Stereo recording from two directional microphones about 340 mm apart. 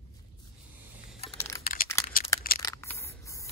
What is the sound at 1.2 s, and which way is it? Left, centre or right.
Computer keyboard, centre.